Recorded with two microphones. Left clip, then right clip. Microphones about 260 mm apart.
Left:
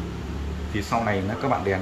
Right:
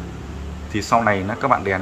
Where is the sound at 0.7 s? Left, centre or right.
Centre.